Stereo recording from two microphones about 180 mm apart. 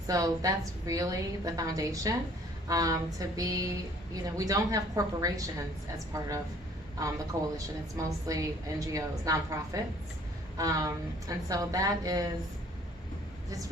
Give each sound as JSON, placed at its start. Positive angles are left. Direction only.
{"t": 0.1, "sound": "a woman's voice", "side_deg": -20}